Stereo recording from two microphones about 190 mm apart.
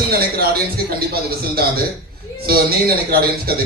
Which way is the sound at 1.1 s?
55° right (ahead or behind).